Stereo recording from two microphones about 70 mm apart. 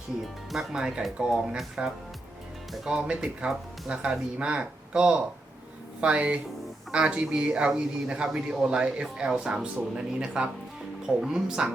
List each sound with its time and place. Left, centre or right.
0.5 s speech: centre
3.0 s speech: centre